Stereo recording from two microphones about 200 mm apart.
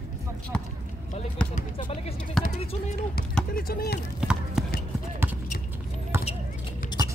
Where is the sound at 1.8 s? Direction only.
25° left (ahead or behind).